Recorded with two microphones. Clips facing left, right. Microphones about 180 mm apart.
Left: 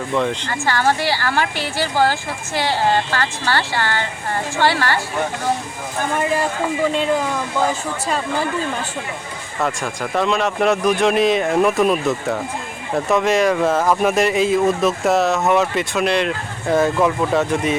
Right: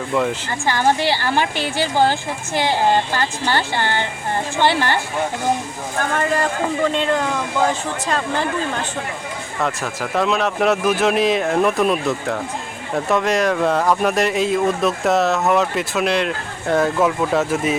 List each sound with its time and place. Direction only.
0.1 s speech: 5° right (ahead or behind)
0.6 s a woman's voice: 15° right (ahead or behind)
6.1 s speech: 10° left (ahead or behind)
9.6 s speech: centre (ahead or behind)